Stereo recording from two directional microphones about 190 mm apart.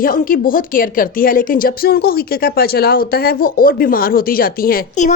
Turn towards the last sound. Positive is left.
turn(degrees=45)  # may be behind; listen again after turning